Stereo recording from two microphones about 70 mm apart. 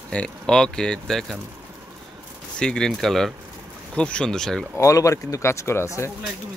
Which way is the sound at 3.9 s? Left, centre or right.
Centre.